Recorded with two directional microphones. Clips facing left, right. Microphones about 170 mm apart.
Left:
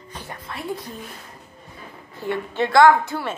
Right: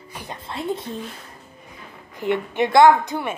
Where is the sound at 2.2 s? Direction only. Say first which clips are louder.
Right 3 dB; 15° right (ahead or behind).